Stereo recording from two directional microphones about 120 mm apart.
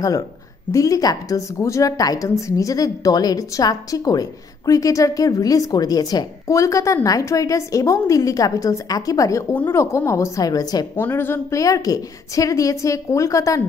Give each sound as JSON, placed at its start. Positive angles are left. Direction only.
{"t": 0.7, "sound": "a woman's voice", "side_deg": 30}
{"t": 9.5, "sound": "a woman's voice", "side_deg": 15}
{"t": 11.0, "sound": "speech", "side_deg": 15}
{"t": 11.6, "sound": "a woman's voice", "side_deg": 30}